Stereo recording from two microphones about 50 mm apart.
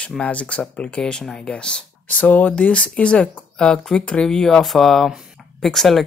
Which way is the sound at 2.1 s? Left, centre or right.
Left.